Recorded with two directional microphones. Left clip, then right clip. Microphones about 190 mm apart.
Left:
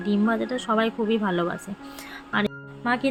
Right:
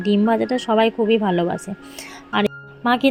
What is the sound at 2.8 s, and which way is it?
Speech, 30° right (ahead or behind).